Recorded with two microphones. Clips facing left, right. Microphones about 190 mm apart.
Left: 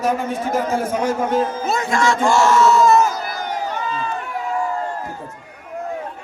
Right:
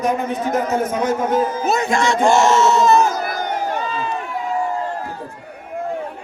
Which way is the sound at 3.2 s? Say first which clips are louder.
Right 3 dB; 50° right (ahead or behind).